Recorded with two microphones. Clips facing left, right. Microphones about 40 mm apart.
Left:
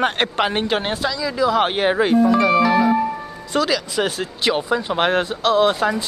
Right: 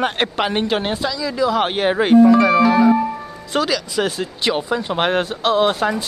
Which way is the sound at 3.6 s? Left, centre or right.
Centre.